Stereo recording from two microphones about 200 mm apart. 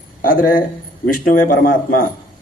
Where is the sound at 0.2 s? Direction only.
45° left (ahead or behind).